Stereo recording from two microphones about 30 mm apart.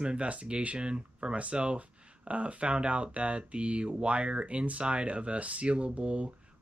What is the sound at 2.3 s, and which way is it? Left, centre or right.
Speech, right.